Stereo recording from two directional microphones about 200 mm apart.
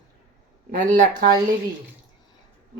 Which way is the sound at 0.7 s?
40° right (ahead or behind).